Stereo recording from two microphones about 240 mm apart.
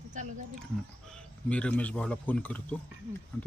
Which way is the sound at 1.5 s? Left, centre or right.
Centre.